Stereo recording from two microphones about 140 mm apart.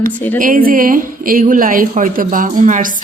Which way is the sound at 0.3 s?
80° right.